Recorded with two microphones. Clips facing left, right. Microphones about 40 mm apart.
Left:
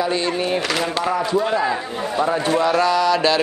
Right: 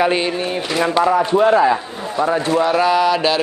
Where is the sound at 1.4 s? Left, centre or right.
Right.